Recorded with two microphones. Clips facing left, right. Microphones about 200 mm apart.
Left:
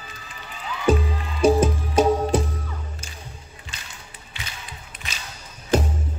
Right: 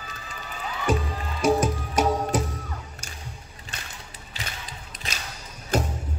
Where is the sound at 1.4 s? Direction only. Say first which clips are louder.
Left 4 dB; 30° left (ahead or behind).